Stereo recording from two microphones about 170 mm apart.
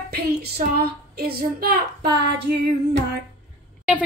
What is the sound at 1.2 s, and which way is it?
Speech, 60° right (ahead or behind).